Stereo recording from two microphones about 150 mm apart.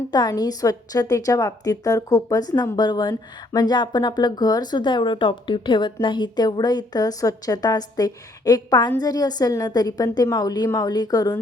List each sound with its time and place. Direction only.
0.1 s a woman's voice: 25° left (ahead or behind)